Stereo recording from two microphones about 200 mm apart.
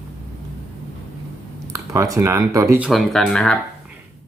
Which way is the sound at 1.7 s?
15° right (ahead or behind).